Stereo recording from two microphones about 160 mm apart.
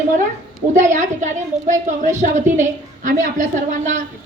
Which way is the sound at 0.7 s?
50° right (ahead or behind).